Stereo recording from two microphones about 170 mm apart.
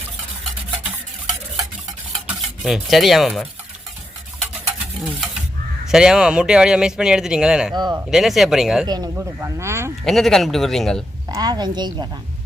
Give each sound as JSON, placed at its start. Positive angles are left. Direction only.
{"t": 2.6, "sound": "speech", "side_deg": 0}
{"t": 5.9, "sound": "speech", "side_deg": -5}
{"t": 7.8, "sound": "a woman's voice", "side_deg": -25}
{"t": 8.1, "sound": "speech", "side_deg": 0}
{"t": 8.9, "sound": "speech", "side_deg": -20}
{"t": 10.0, "sound": "speech", "side_deg": 0}
{"t": 11.3, "sound": "a woman's voice", "side_deg": -20}